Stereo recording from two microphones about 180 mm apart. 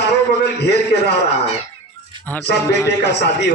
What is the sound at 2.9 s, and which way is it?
Speech, 70° left (ahead or behind).